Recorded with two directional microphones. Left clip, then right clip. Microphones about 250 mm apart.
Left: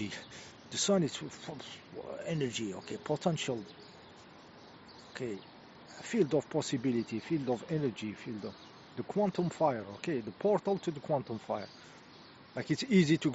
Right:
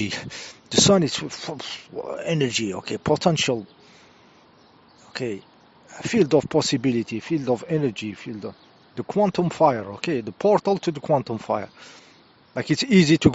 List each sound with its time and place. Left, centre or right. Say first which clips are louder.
0.0 s speech: right 13 dB; right
5.1 s speech: right 11 dB; right